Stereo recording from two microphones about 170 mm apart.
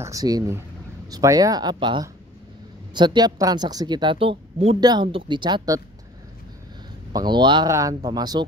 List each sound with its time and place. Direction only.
0.0 s speech: 20° right (ahead or behind)
4.7 s speech: 25° right (ahead or behind)
7.1 s speech: 25° right (ahead or behind)